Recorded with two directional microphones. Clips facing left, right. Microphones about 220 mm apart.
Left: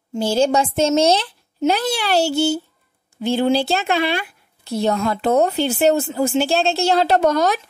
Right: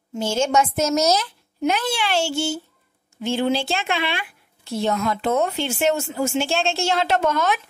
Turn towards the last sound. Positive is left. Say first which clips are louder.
# left 4 dB
turn(degrees=35)  # may be behind; listen again after turning